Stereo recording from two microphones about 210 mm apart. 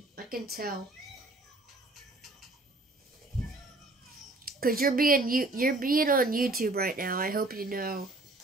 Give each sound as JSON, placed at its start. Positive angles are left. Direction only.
{"t": 0.1, "sound": "speech", "side_deg": -45}
{"t": 4.5, "sound": "a woman's voice", "side_deg": -45}